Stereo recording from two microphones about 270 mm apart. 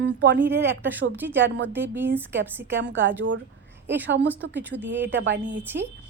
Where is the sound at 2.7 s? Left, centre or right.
Right.